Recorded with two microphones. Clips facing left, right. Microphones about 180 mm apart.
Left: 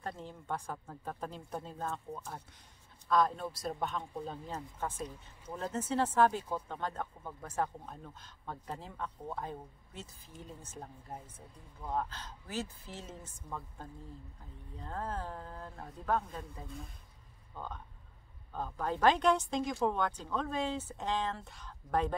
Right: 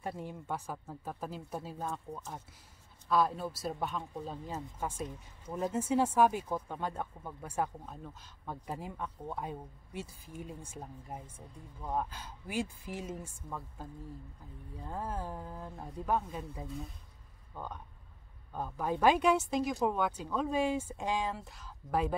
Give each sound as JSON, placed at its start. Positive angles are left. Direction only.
{"t": 0.0, "sound": "speech", "side_deg": -10}
{"t": 18.5, "sound": "speech", "side_deg": -10}